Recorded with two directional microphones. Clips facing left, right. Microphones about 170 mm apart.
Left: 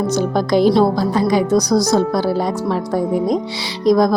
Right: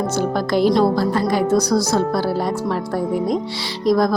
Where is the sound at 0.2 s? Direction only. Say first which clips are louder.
Left 2 dB; 5° right (ahead or behind).